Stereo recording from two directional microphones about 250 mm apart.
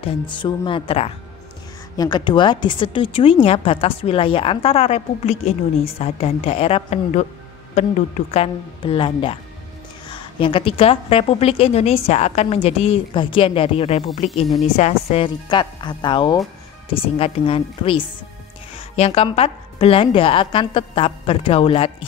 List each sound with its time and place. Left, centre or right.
0.0 s a woman's voice: centre
8.3 s a woman's voice: left